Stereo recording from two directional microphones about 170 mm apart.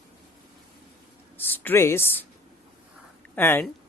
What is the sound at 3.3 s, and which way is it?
Speech, 10° left (ahead or behind).